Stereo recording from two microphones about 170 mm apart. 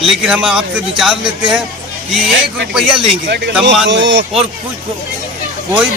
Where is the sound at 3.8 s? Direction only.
90° right.